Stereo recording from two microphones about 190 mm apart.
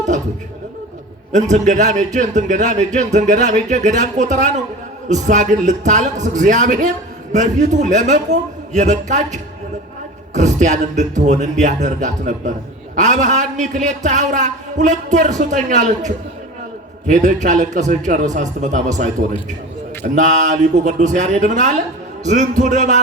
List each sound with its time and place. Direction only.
1.3 s a man's voice: 40° right (ahead or behind)